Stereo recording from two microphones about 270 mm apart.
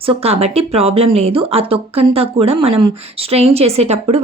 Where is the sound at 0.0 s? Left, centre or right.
Right.